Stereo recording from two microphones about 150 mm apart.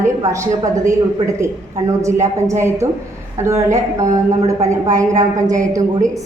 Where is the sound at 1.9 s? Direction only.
20° right (ahead or behind).